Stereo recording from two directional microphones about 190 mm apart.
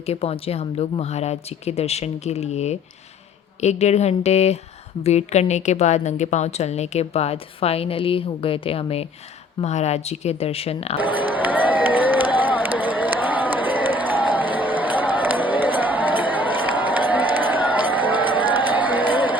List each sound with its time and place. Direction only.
0.0 s a woman's voice: 30° left (ahead or behind)
11.3 s run: 10° right (ahead or behind)